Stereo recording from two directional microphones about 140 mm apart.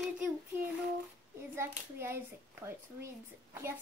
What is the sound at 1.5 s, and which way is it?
Speech, 20° right (ahead or behind).